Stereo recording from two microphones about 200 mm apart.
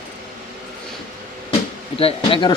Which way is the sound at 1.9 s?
30° left (ahead or behind).